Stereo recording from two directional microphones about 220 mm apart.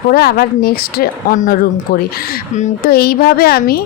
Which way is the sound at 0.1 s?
45° left (ahead or behind).